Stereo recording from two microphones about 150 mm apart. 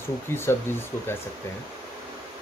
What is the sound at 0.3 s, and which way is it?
Speech, 15° left (ahead or behind).